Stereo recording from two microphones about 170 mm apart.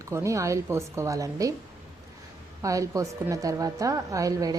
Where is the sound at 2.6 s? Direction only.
20° right (ahead or behind).